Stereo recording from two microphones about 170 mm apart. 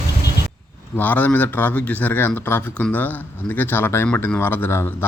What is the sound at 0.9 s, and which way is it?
Speech, 10° left (ahead or behind).